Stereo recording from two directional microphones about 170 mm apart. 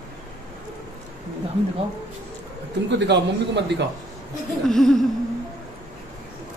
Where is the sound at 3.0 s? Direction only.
90° right.